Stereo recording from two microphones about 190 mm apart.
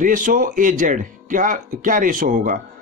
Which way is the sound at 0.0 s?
45° right (ahead or behind).